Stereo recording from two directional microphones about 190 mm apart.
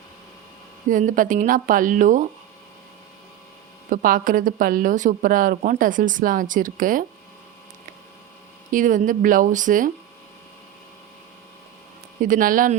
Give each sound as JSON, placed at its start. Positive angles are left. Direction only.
{"t": 0.9, "sound": "speech", "side_deg": -45}
{"t": 3.8, "sound": "speech", "side_deg": -45}
{"t": 8.7, "sound": "speech", "side_deg": -45}
{"t": 12.2, "sound": "speech", "side_deg": -45}